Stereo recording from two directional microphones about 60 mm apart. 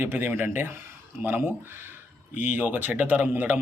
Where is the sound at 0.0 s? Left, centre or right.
Right.